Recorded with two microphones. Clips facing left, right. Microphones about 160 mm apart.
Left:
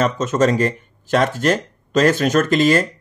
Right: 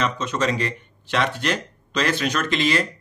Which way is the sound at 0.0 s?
45° left (ahead or behind).